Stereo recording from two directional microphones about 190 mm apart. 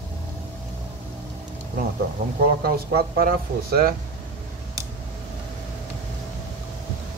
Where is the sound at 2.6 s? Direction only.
50° right (ahead or behind).